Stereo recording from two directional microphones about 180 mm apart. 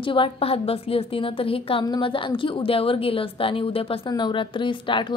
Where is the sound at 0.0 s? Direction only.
30° left (ahead or behind).